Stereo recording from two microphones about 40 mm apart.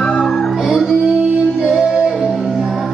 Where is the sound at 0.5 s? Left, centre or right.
Centre.